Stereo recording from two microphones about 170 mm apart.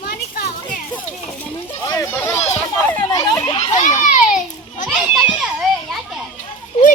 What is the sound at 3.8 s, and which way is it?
Children playing, 45° left (ahead or behind).